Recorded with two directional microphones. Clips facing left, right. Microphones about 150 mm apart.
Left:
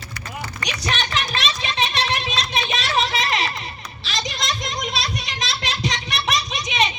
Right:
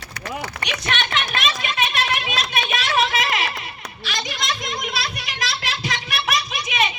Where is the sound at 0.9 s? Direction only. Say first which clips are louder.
Even; 35° left (ahead or behind).